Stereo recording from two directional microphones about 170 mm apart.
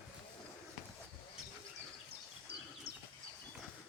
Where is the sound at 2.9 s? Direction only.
60° right (ahead or behind).